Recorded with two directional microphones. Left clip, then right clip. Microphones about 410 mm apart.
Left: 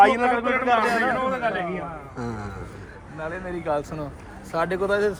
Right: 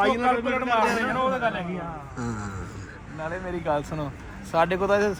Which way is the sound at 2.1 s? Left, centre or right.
Centre.